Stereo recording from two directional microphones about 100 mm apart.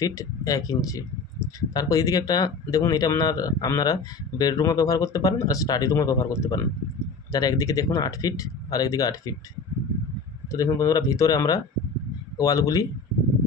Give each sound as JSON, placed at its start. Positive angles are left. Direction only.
{"t": 0.0, "sound": "speech", "side_deg": 35}
{"t": 10.5, "sound": "speech", "side_deg": 35}